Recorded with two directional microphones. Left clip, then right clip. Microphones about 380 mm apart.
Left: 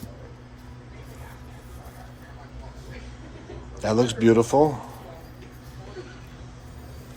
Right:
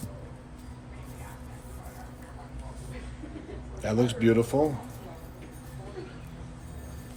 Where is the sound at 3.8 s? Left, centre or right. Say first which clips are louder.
Left 5 dB; centre.